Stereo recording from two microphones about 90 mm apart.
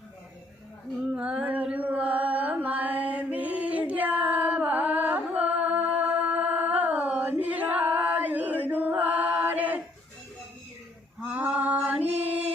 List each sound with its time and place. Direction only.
1.1 s mantra: 15° right (ahead or behind)
7.4 s chant: 20° right (ahead or behind)
11.3 s a sound: 15° right (ahead or behind)